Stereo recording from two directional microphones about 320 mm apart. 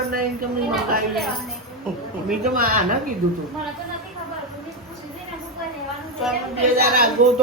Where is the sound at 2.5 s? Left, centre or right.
Right.